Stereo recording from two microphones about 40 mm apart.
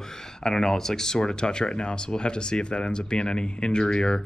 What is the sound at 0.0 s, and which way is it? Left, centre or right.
Speech, centre.